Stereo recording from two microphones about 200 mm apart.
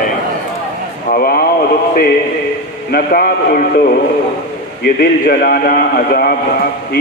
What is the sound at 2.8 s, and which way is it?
A man's voice, 45° left (ahead or behind).